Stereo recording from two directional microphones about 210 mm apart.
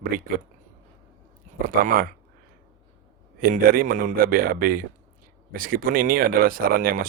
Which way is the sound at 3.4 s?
45° right (ahead or behind).